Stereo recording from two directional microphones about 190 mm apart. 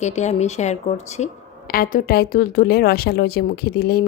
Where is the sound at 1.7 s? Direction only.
50° left (ahead or behind).